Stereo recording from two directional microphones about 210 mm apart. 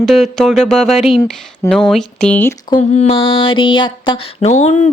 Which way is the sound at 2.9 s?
30° left (ahead or behind).